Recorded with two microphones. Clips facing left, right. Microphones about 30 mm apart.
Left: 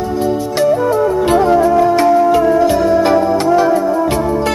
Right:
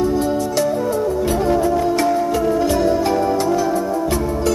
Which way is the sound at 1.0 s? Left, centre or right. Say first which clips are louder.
Left 6 dB; left.